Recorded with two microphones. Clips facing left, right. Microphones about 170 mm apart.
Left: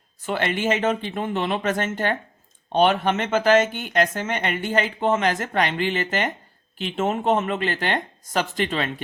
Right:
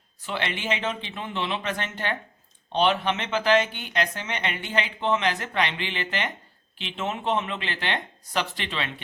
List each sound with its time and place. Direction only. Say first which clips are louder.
0.2 s speech: left 6 dB; 45° left (ahead or behind)